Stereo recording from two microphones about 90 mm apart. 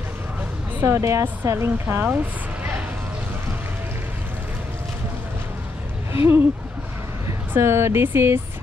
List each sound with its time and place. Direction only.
0.7 s a woman's voice: 30° right (ahead or behind)
6.1 s a woman's voice: 25° right (ahead or behind)